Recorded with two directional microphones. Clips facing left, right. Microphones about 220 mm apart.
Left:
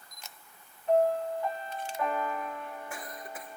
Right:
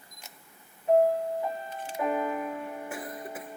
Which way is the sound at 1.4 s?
10° right (ahead or behind).